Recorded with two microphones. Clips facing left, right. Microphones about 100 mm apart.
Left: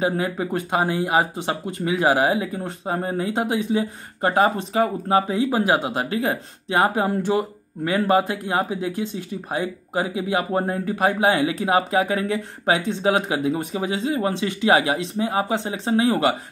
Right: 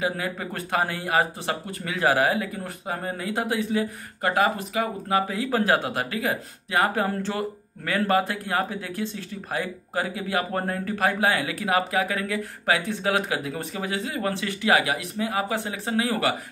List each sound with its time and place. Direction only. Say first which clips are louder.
0.0 s speech: left 5 dB; 25° left (ahead or behind)
5.3 s speech: left 3 dB; 20° left (ahead or behind)